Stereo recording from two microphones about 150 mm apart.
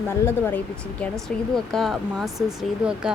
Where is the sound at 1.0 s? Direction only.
5° left (ahead or behind).